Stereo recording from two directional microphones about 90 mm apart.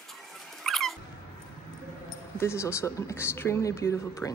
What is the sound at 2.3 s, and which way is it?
Speech, 30° left (ahead or behind).